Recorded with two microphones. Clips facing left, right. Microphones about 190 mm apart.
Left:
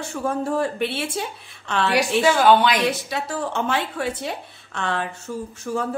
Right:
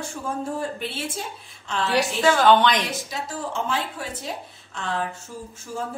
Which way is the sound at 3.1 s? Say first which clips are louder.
Left 4 dB; 65° left (ahead or behind).